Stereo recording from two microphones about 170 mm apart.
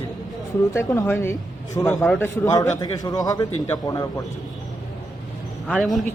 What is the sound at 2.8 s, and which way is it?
A man's voice, 20° left (ahead or behind).